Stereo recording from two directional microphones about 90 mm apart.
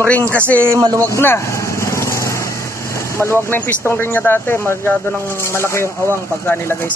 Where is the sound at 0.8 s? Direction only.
45° right (ahead or behind).